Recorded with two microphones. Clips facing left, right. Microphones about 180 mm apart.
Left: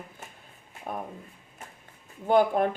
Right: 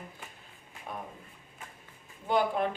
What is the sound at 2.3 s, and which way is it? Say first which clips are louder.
Speech: left 6 dB; 50° left (ahead or behind).